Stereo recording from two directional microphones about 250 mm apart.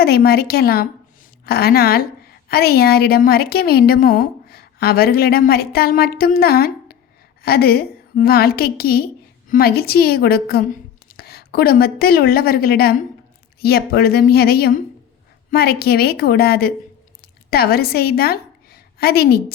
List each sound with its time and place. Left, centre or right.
0.0 s a woman's voice: left